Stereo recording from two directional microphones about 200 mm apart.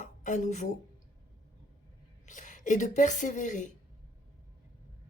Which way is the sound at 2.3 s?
40° left (ahead or behind).